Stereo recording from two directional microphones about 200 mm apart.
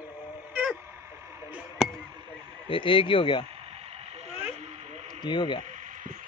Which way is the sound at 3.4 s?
30° right (ahead or behind).